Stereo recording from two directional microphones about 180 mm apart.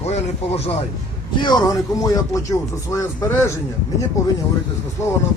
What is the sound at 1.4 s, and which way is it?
Speech, 20° left (ahead or behind).